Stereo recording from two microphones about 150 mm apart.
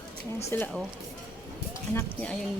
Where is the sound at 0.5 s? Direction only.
15° left (ahead or behind).